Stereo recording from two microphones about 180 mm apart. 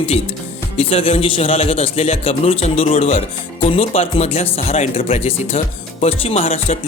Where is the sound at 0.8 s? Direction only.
35° left (ahead or behind).